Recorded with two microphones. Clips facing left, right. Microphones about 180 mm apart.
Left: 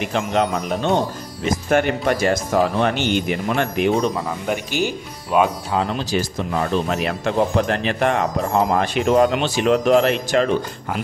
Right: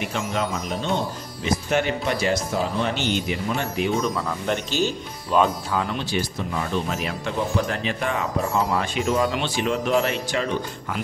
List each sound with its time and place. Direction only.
0.1 s speech: 65° left (ahead or behind)
0.9 s speech: 50° left (ahead or behind)
2.5 s speech: 65° left (ahead or behind)
4.5 s speech: 15° left (ahead or behind)
5.7 s speech: 35° left (ahead or behind)
6.6 s speech: 65° left (ahead or behind)
8.5 s speech: 45° left (ahead or behind)
9.4 s speech: 75° left (ahead or behind)